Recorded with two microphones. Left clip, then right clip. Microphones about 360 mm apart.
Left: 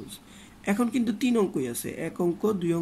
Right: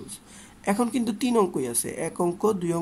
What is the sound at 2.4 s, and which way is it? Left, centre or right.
Speech, centre.